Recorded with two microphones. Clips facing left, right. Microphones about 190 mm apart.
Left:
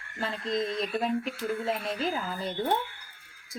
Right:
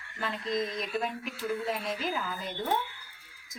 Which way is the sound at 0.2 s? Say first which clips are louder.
Left 1 dB; 30° left (ahead or behind).